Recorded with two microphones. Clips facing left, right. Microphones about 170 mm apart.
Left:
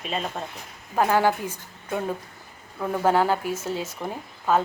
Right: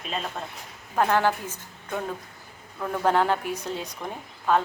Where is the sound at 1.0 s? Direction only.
10° left (ahead or behind).